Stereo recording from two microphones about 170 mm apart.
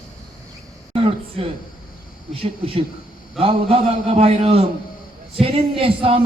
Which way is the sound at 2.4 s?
35° right (ahead or behind).